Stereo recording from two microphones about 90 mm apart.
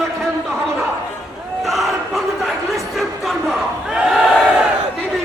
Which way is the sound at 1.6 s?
Centre (ahead or behind).